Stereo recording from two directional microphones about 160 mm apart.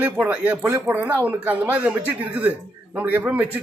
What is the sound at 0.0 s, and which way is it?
Speech, 10° right (ahead or behind).